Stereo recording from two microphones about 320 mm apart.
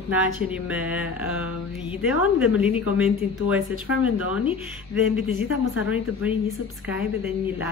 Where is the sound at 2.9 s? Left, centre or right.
Centre.